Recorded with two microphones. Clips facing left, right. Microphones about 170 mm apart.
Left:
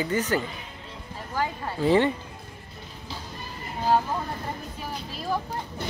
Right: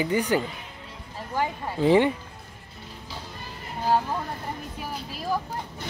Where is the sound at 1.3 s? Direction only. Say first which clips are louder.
Right 1 dB; 20° right (ahead or behind).